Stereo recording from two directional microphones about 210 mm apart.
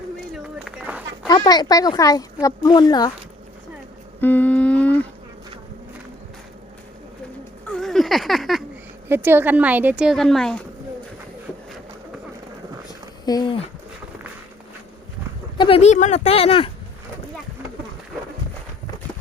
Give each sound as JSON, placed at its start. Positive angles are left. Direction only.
{"t": 0.3, "sound": "a sound", "side_deg": -5}
{"t": 1.3, "sound": "speech", "side_deg": 20}
{"t": 4.2, "sound": "humming", "side_deg": 10}
{"t": 7.7, "sound": "a sound", "side_deg": 0}
{"t": 9.0, "sound": "a woman's voice", "side_deg": -10}
{"t": 13.2, "sound": "speech", "side_deg": 20}
{"t": 15.5, "sound": "speech", "side_deg": 25}